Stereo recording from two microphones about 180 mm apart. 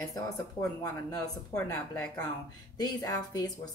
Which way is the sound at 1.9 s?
20° left (ahead or behind).